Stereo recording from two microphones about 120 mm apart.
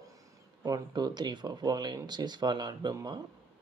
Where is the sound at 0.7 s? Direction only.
35° right (ahead or behind).